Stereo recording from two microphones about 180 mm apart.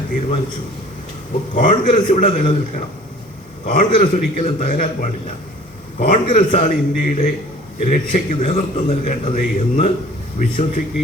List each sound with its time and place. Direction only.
1.5 s a man's voice: 45° left (ahead or behind)